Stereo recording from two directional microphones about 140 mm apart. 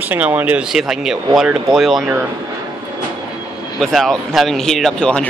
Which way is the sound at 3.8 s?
Centre (ahead or behind).